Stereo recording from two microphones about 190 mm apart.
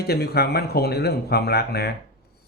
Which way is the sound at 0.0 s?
55° left (ahead or behind).